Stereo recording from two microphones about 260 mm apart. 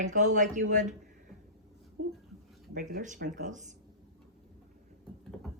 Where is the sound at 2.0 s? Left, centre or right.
Right.